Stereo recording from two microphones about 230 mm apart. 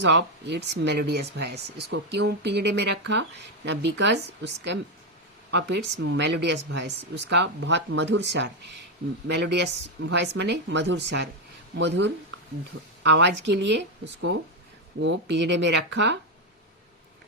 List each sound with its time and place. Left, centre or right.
0.0 s speech: right